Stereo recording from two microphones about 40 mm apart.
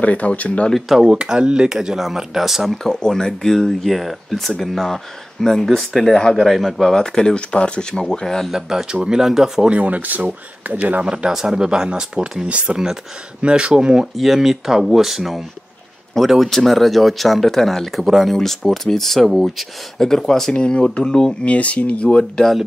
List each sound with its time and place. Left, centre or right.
0.0 s speech: left
0.7 s speech: centre
1.1 s speech: right; by 2.8 s centre
2.8 s speech: centre
3.5 s speech: centre
7.2 s speech: left
8.5 s speech: centre
9.7 s speech: right
10.7 s speech: right
11.2 s speech: centre
14.1 s speech: centre
16.3 s speech: centre
20.5 s speech: left
21.5 s speech: left